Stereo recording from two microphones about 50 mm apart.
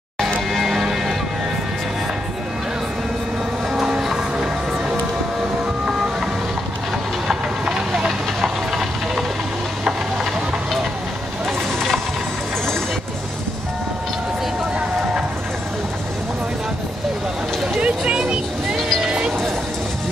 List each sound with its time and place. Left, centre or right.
0.5 s music: centre
4.0 s music: centre
7.2 s train: centre
8.0 s steam: centre
11.4 s vehicle: centre
17.7 s a sound: right
19.0 s music: centre